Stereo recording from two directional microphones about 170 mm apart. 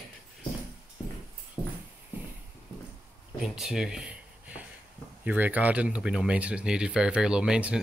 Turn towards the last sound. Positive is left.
turn(degrees=-5)  # may be behind; listen again after turning